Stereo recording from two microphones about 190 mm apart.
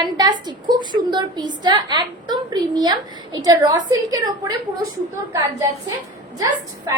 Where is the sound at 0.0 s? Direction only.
20° right (ahead or behind).